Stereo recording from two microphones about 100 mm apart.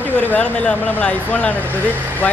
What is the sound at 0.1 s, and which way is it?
Speech, 20° left (ahead or behind).